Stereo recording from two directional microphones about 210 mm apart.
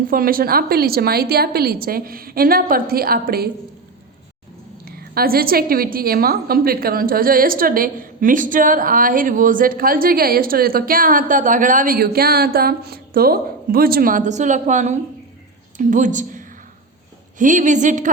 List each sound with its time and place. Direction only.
0.1 s a woman's voice: 45° right (ahead or behind)
4.9 s a woman's voice: 45° right (ahead or behind)